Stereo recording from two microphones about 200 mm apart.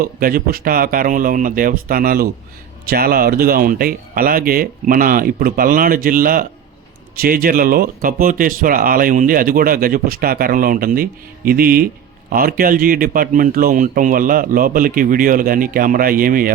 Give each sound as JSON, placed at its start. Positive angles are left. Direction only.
{"t": 0.0, "sound": "speech", "side_deg": -45}